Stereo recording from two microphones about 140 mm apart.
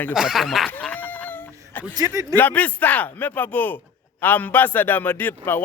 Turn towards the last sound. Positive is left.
turn(degrees=15)  # may be behind; listen again after turning